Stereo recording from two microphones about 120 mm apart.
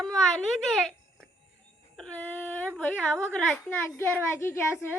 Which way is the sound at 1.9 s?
10° left (ahead or behind).